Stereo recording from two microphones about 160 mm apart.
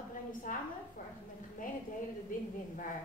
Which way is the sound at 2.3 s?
60° left (ahead or behind).